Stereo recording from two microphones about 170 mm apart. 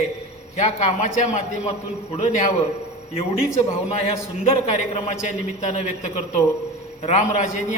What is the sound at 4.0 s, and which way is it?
A man's voice, 40° left (ahead or behind).